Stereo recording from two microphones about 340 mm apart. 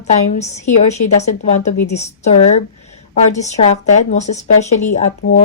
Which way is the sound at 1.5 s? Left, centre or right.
Left.